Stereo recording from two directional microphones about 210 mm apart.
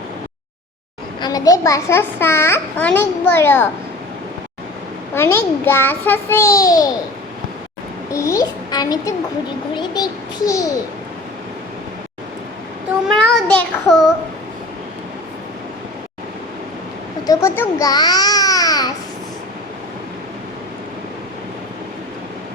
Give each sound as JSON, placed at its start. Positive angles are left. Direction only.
{"t": 1.2, "sound": "a child's voice", "side_deg": 15}
{"t": 5.1, "sound": "a child's voice", "side_deg": 10}
{"t": 8.1, "sound": "a child's voice", "side_deg": 15}
{"t": 13.2, "sound": "a child's voice", "side_deg": 5}
{"t": 17.2, "sound": "speech", "side_deg": 10}